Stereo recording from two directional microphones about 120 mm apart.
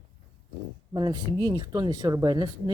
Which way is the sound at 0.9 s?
35° right (ahead or behind).